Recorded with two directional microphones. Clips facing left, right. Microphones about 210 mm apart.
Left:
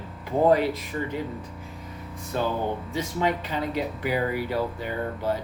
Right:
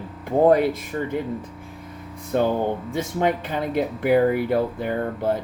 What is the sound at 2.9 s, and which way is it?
Speech, 50° right (ahead or behind).